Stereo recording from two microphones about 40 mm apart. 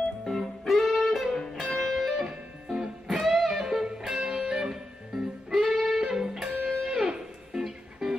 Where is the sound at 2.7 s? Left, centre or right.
Centre.